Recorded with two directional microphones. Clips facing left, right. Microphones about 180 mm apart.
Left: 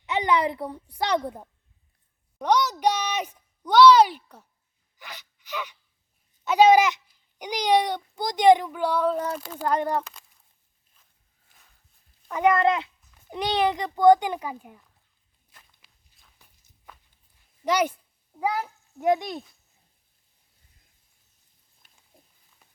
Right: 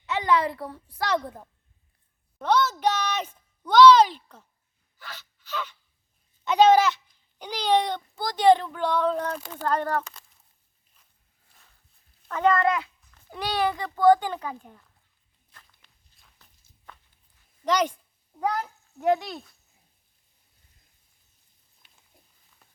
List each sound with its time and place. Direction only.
0.0 s a child's voice: 15° left (ahead or behind)
4.9 s sneeze: 15° left (ahead or behind)
6.4 s a child's voice: 10° left (ahead or behind)
12.3 s a child's voice: 15° left (ahead or behind)
16.4 s walk: 10° left (ahead or behind)
17.7 s a child's voice: 10° left (ahead or behind)